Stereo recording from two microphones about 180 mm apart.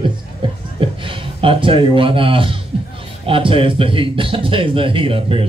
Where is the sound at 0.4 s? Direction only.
30° right (ahead or behind).